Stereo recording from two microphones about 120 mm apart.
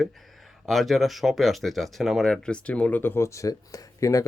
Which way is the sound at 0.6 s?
Centre (ahead or behind).